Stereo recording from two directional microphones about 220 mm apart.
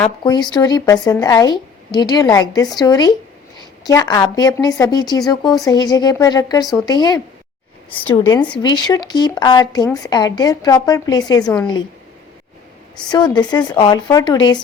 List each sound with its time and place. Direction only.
0.2 s speech: 20° left (ahead or behind)
8.5 s speech: 20° left (ahead or behind)
13.1 s speech: 20° left (ahead or behind)